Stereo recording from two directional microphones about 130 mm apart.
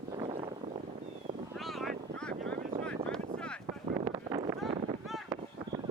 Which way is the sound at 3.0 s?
45° right (ahead or behind).